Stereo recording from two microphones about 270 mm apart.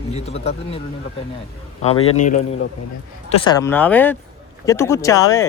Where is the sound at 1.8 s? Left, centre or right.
Left.